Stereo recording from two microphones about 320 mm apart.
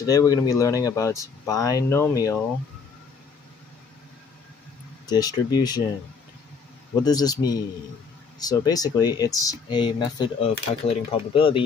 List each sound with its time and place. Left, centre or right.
0.0 s speech: centre
5.0 s speech: centre
7.0 s speech: centre